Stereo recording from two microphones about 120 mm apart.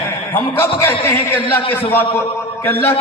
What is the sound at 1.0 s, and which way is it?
A man's voice, 20° left (ahead or behind).